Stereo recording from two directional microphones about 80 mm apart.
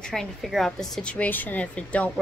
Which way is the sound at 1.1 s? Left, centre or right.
Left.